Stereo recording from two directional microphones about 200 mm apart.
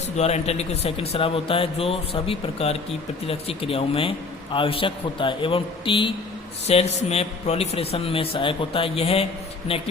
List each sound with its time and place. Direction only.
0.2 s speech: 30° left (ahead or behind)